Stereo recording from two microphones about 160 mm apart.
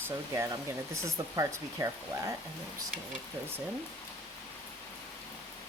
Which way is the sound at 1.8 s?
20° right (ahead or behind).